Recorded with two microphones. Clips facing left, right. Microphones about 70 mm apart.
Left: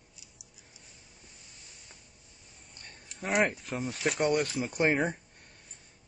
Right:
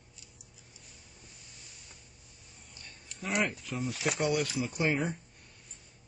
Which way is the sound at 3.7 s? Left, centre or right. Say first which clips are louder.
Left 1 dB; left.